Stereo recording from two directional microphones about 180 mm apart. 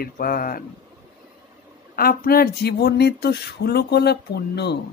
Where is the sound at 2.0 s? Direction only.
55° left (ahead or behind).